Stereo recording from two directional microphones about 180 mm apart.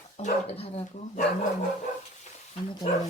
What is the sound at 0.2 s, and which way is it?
Speech, 35° left (ahead or behind).